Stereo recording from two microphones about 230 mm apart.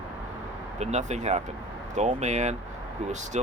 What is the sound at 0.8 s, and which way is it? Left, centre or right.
Speech, right.